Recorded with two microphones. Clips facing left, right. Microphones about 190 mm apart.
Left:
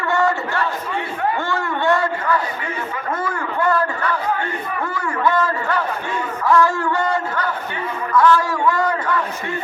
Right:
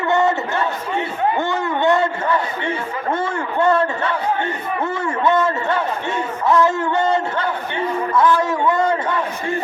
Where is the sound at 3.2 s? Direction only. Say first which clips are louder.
Right 2 dB; 25° right (ahead or behind).